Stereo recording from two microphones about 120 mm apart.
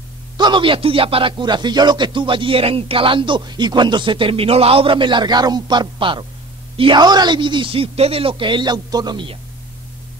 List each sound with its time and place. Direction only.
0.4 s speech: 40° right (ahead or behind)